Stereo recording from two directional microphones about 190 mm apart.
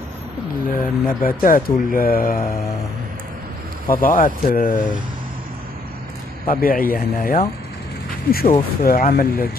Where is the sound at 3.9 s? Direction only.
45° left (ahead or behind).